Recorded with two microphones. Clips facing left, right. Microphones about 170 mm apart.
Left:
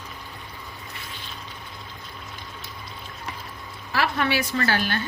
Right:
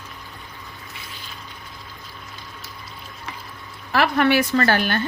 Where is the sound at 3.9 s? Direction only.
60° right (ahead or behind).